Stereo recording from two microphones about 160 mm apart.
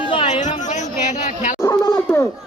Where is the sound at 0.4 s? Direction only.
50° left (ahead or behind).